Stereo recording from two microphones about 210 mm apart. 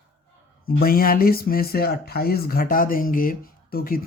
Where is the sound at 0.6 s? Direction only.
45° left (ahead or behind).